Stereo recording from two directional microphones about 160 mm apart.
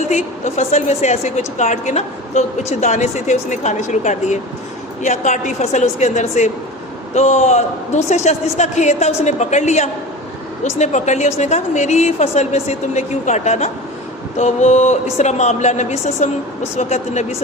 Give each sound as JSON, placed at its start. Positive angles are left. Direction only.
{"t": 0.1, "sound": "a woman's voice", "side_deg": 45}